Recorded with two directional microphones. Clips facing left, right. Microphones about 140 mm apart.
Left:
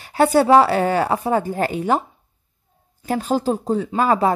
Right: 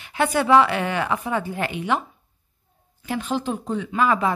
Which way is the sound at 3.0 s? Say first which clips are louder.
Left 5 dB; 40° left (ahead or behind).